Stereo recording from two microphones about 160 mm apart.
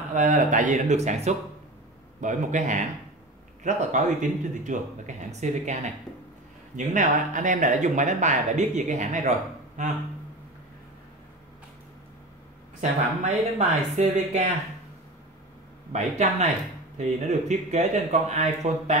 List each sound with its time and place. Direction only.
0.1 s speech: 50° right (ahead or behind)
13.2 s speech: 45° right (ahead or behind)
15.9 s speech: 45° right (ahead or behind)